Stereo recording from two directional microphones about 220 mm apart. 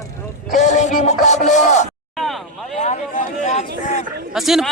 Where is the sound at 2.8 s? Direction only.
30° left (ahead or behind).